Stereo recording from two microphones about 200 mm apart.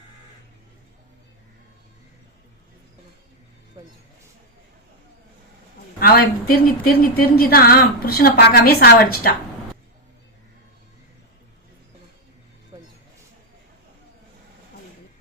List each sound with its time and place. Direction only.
3.8 s speech: 20° right (ahead or behind)
6.0 s speech: 50° left (ahead or behind)
12.7 s a sound: 20° right (ahead or behind)